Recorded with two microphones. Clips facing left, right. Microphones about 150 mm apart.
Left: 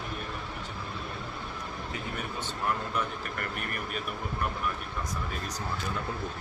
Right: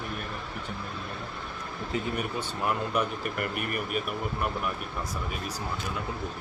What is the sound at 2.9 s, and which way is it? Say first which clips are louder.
Speech: right 4 dB; 15° right (ahead or behind).